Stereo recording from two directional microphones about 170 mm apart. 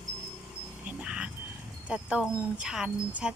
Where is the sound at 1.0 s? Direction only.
5° right (ahead or behind).